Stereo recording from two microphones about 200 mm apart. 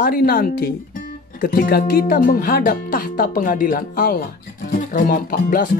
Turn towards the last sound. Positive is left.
turn(degrees=45)  # may be behind; listen again after turning